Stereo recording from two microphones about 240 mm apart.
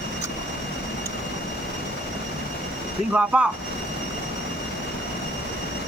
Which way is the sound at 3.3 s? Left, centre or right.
Centre.